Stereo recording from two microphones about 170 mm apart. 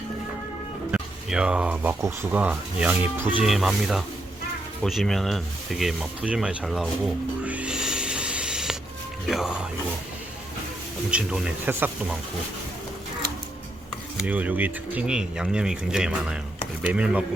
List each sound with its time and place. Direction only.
0.9 s speech: 5° right (ahead or behind)
11.1 s speech: 5° right (ahead or behind)
14.3 s speech: 10° right (ahead or behind)